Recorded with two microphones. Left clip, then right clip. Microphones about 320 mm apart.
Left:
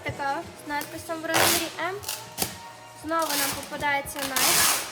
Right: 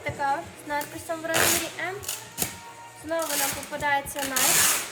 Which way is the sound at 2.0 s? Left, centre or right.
Left.